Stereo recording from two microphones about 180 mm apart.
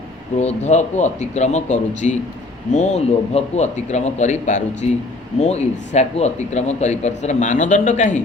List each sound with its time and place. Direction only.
0.3 s a man's voice: 40° left (ahead or behind)